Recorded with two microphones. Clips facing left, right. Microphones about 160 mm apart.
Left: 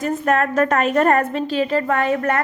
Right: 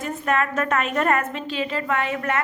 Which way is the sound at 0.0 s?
45° left (ahead or behind).